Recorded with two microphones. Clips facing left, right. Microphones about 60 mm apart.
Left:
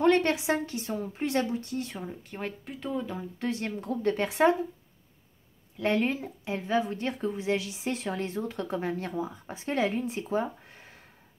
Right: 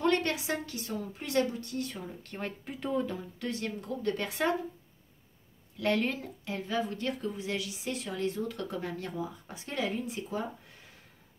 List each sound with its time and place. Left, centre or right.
0.0 s a woman's voice: left
2.0 s speech: centre
3.3 s speech: left
5.8 s a woman's voice: left